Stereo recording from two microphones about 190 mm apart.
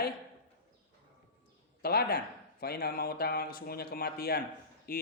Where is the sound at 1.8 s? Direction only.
55° left (ahead or behind).